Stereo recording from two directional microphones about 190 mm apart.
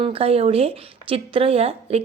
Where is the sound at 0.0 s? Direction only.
30° right (ahead or behind).